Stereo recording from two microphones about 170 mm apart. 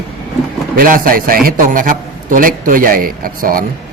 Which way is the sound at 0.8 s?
55° right (ahead or behind).